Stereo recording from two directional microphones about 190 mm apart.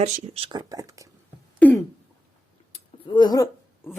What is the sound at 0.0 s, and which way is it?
Speech, 30° right (ahead or behind).